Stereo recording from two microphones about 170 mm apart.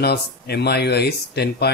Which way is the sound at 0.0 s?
70° left (ahead or behind).